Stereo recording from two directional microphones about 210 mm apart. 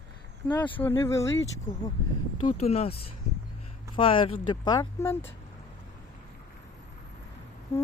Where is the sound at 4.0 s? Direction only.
25° left (ahead or behind).